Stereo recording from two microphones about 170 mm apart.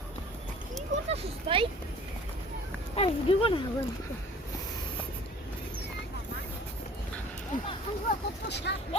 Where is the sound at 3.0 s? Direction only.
35° left (ahead or behind).